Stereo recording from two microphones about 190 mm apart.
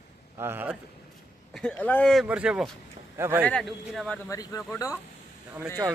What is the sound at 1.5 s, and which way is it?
Speech, 5° left (ahead or behind).